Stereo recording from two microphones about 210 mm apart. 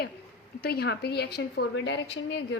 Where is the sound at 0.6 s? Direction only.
50° left (ahead or behind).